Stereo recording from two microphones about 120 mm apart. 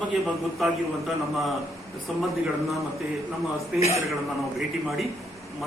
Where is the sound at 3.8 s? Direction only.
60° left (ahead or behind).